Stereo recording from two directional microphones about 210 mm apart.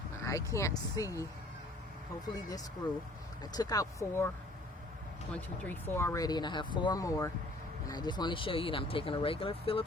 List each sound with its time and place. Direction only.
0.3 s speech: 15° left (ahead or behind)
3.4 s speech: 20° left (ahead or behind)
5.3 s speech: 10° left (ahead or behind); by 9.8 s 25° left (ahead or behind)